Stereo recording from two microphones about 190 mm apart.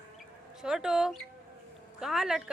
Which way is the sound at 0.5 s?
Centre (ahead or behind).